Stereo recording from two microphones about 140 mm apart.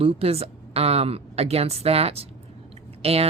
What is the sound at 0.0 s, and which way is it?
Speech, 45° right (ahead or behind).